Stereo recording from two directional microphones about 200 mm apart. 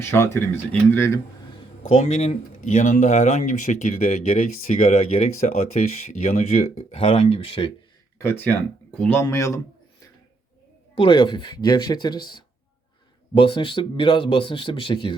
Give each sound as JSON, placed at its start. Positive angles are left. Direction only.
{"t": 0.0, "sound": "speech", "side_deg": 10}
{"t": 2.0, "sound": "speech", "side_deg": 35}
{"t": 8.2, "sound": "speech", "side_deg": 10}
{"t": 10.9, "sound": "speech", "side_deg": 25}